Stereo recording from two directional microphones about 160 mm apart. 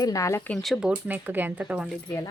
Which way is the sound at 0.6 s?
Centre (ahead or behind).